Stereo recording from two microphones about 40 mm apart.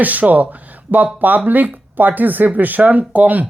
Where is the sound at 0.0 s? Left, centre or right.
Right.